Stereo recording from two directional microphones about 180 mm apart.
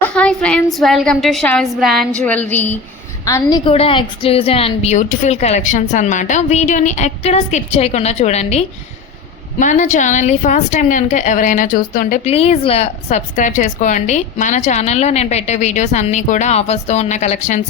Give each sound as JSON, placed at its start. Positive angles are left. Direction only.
{"t": 0.0, "sound": "a woman's voice", "side_deg": 5}
{"t": 3.7, "sound": "a woman's voice", "side_deg": 30}
{"t": 12.3, "sound": "a woman's voice", "side_deg": 35}